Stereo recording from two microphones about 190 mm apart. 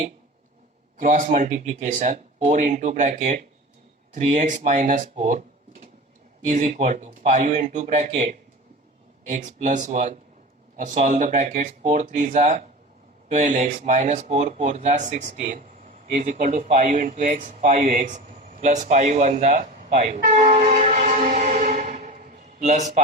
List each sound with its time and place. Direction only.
1.0 s speech: 40° right (ahead or behind)
6.5 s speech: 35° right (ahead or behind)